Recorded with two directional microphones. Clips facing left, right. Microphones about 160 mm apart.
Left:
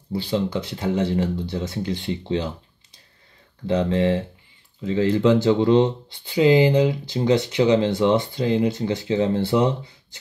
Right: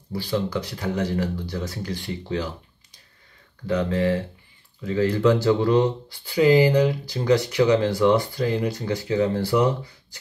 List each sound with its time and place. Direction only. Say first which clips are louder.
0.1 s speech: left 2 dB; 25° left (ahead or behind)